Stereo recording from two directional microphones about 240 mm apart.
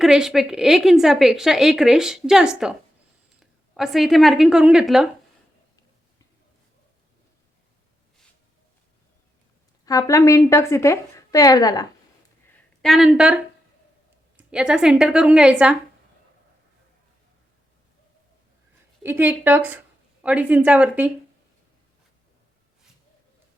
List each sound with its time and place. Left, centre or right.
0.0 s a woman's voice: centre
9.8 s a woman's voice: centre
12.5 s a sound: centre
14.3 s a woman's voice: centre
19.0 s a woman's voice: centre